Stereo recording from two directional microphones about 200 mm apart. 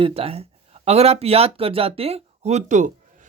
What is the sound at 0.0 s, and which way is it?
A woman's voice, 30° right (ahead or behind).